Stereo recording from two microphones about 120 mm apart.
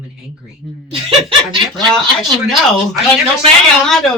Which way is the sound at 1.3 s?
45° right (ahead or behind).